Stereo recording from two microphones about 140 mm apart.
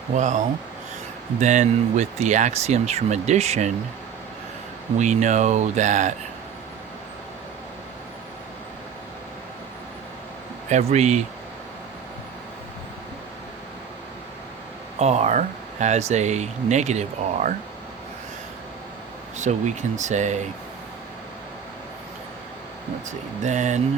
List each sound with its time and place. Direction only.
0.2 s speech: 60° right (ahead or behind)
4.9 s speech: 55° right (ahead or behind)
10.7 s speech: 55° right (ahead or behind)
14.9 s speech: 50° right (ahead or behind)
19.4 s speech: 55° right (ahead or behind)
23.0 s speech: 60° right (ahead or behind)